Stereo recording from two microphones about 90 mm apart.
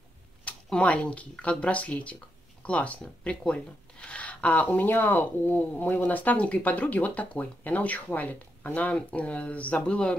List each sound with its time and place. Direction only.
0.5 s speech: 15° left (ahead or behind)